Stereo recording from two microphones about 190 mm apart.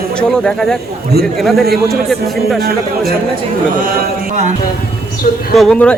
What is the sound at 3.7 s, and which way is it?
Speech, 45° right (ahead or behind).